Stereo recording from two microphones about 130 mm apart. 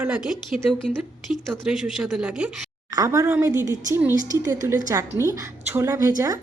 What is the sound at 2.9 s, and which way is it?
A woman's voice, 25° right (ahead or behind).